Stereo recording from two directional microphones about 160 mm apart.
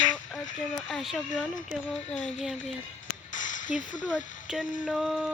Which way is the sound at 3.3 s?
55° left (ahead or behind).